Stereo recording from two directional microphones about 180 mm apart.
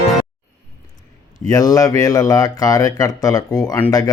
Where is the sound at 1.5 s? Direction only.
20° left (ahead or behind).